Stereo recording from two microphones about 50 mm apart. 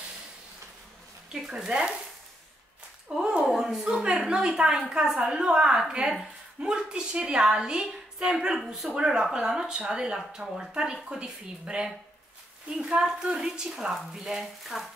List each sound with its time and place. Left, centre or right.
1.4 s a woman's voice: centre
1.7 s stir: centre
3.2 s a woman's voice: centre
14.2 s speech: centre